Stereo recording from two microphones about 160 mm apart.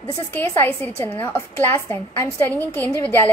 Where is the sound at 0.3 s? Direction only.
10° left (ahead or behind).